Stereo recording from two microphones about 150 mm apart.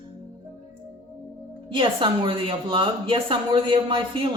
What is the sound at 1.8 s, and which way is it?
Speech, 35° right (ahead or behind).